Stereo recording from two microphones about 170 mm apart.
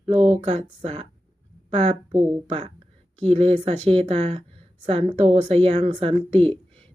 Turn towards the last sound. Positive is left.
turn(degrees=-35)  # may be behind; listen again after turning